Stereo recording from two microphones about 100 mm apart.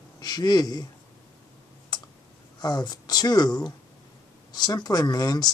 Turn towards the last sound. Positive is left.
turn(degrees=40)  # may be behind; listen again after turning